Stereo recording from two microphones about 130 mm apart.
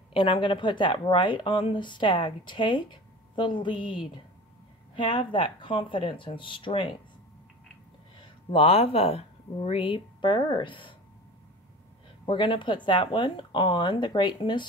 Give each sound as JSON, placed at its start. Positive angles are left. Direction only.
{"t": 0.1, "sound": "speech", "side_deg": 40}
{"t": 4.9, "sound": "speech", "side_deg": 40}
{"t": 8.5, "sound": "speech", "side_deg": 45}
{"t": 12.3, "sound": "speech", "side_deg": 40}